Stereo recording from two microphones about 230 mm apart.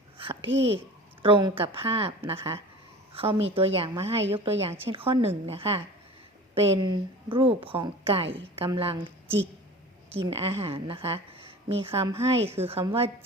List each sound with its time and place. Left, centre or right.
0.2 s a sound: right
1.2 s a woman's voice: right
6.8 s a woman's voice: right